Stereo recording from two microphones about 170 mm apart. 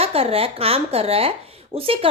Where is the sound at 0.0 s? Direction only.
35° right (ahead or behind).